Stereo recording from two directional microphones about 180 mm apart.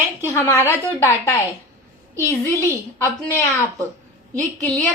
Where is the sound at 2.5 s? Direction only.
15° left (ahead or behind).